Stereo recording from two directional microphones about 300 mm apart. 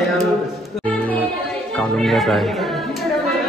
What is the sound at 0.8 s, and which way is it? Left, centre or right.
Music, centre.